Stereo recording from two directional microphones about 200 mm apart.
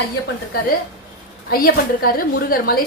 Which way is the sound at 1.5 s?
45° left (ahead or behind).